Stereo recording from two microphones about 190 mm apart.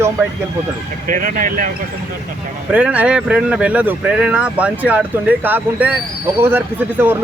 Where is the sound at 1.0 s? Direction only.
45° right (ahead or behind).